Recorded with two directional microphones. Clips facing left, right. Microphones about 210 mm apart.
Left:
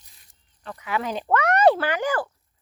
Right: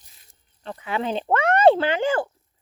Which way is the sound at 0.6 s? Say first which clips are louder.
Right 1 dB; 30° right (ahead or behind).